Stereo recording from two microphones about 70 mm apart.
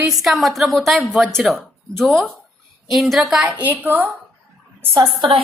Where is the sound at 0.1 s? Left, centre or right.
Centre.